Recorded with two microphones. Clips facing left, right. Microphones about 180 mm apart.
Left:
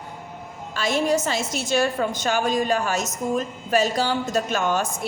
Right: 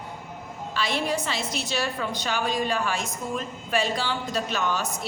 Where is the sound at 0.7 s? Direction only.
45° left (ahead or behind).